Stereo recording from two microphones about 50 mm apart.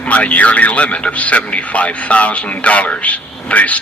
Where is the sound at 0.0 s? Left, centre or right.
Left.